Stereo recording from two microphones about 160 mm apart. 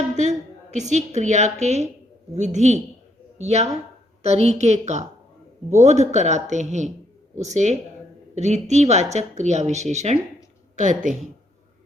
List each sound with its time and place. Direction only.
0.2 s a woman's voice: 50° right (ahead or behind)